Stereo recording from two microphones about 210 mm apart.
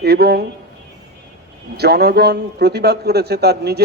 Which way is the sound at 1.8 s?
50° right (ahead or behind).